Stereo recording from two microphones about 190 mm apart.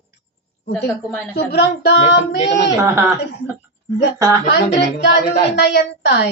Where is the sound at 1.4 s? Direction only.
60° left (ahead or behind).